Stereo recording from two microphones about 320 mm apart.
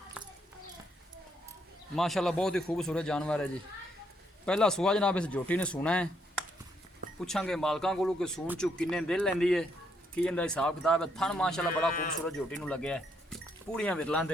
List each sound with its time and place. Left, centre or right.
0.2 s a sound: centre
2.0 s speech: centre
7.3 s speech: centre